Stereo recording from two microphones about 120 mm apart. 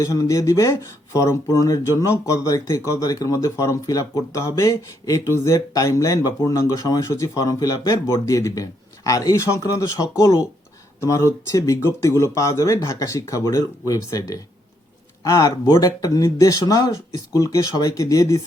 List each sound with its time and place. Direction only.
0.0 s speech: 30° left (ahead or behind)